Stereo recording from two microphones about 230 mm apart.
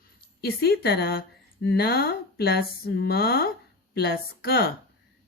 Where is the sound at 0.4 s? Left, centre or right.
Left.